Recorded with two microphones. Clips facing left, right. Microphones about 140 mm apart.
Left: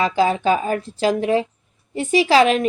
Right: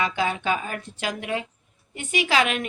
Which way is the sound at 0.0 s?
35° left (ahead or behind).